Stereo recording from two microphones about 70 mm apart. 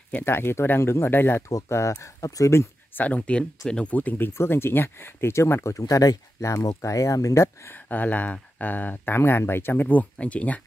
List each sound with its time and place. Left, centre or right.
0.2 s speech: left
1.5 s speech: left
3.0 s speech: centre
4.3 s speech: left
7.4 s speech: left